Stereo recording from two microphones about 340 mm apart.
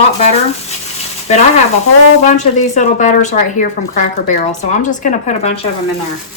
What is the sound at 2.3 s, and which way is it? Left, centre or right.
A woman's voice, left.